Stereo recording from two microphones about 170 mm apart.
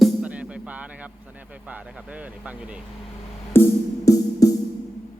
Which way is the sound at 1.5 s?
10° right (ahead or behind).